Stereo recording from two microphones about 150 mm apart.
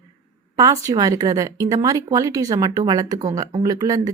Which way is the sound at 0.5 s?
20° right (ahead or behind).